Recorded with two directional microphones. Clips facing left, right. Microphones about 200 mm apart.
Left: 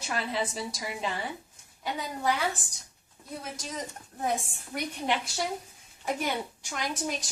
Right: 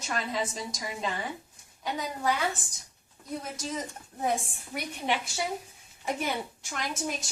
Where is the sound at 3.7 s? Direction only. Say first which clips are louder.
Right 2 dB; 5° right (ahead or behind).